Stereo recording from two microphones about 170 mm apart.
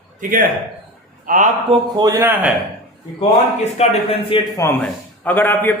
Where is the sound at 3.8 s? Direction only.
35° left (ahead or behind).